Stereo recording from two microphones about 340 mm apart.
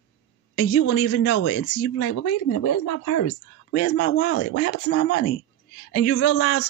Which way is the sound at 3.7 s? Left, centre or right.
Left.